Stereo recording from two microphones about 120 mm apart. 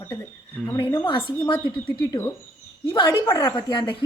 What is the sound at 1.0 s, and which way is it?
Speech, 45° left (ahead or behind).